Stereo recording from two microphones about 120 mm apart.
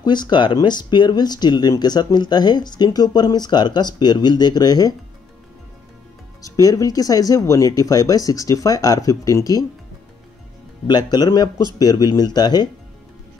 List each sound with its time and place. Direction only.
0.0 s speech: 40° left (ahead or behind)
6.4 s speech: 30° left (ahead or behind)
10.9 s speech: 35° left (ahead or behind)